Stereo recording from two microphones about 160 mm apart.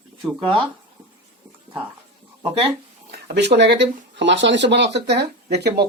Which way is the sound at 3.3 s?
90° right.